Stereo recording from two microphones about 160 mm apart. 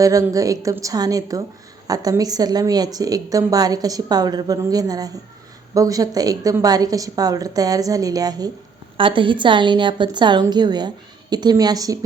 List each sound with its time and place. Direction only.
0.0 s a woman's voice: 20° right (ahead or behind)